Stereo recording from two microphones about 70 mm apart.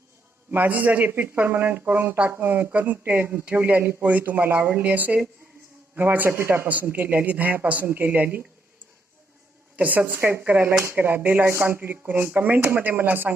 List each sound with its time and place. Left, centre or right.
0.5 s speech: right
2.1 s speech: right
2.4 s speech: right
2.6 s speech: right
6.7 s speech: right
9.7 s speech: right